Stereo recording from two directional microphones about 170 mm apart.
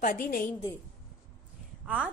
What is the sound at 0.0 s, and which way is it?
Speech, 55° left (ahead or behind).